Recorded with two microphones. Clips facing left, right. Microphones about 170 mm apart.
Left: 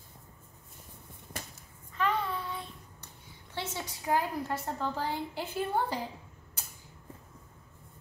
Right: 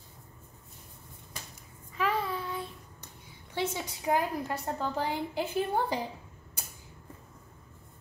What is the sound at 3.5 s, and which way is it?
A woman's voice, 15° right (ahead or behind).